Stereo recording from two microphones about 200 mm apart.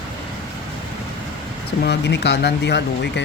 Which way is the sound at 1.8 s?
60° left (ahead or behind).